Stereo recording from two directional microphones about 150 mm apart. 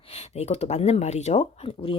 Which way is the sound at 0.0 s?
40° left (ahead or behind).